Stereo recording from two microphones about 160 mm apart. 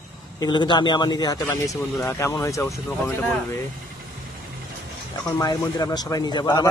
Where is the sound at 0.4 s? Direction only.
30° left (ahead or behind).